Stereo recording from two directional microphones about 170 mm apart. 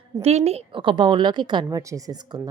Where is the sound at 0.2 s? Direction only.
40° right (ahead or behind).